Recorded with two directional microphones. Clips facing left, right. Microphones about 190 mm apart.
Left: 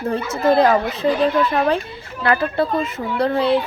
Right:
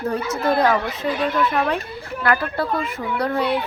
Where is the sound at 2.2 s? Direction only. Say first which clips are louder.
Left 3 dB; 25° left (ahead or behind).